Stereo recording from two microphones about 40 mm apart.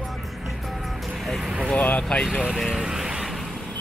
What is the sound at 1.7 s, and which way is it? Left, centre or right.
Speech, left.